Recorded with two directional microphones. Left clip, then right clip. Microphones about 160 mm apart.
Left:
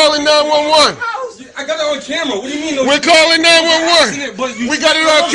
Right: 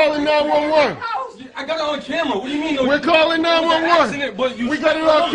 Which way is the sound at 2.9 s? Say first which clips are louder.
Left 7 dB; 5° right (ahead or behind).